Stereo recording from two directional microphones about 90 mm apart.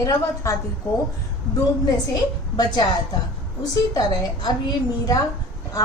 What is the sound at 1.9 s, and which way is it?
A woman's voice, 45° left (ahead or behind).